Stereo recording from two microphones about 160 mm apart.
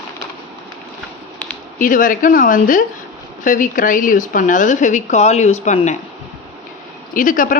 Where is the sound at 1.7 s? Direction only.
55° left (ahead or behind).